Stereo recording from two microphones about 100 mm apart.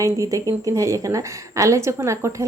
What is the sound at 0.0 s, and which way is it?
A woman's voice, 35° right (ahead or behind).